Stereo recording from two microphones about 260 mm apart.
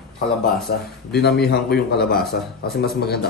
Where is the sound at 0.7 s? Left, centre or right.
Left.